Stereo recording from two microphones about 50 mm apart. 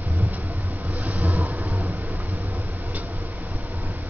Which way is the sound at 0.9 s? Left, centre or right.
Right.